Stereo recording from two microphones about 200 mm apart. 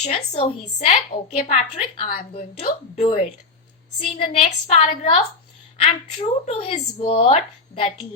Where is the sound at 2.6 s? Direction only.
35° left (ahead or behind).